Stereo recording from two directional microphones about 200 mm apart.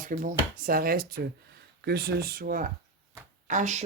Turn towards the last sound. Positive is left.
turn(degrees=-35)  # may be behind; listen again after turning